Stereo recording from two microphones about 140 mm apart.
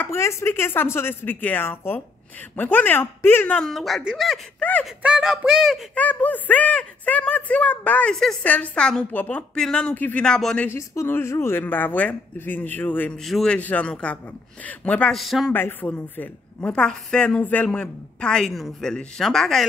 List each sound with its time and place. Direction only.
0.0 s speech: 20° left (ahead or behind); by 4.4 s 5° right (ahead or behind)
4.6 s a sound: 10° left (ahead or behind)
5.0 s speech: 5° right (ahead or behind)
5.9 s speech: 10° left (ahead or behind)
10.8 s speech: 20° left (ahead or behind)
13.2 s speech: centre (ahead or behind)
15.5 s speech: 15° left (ahead or behind)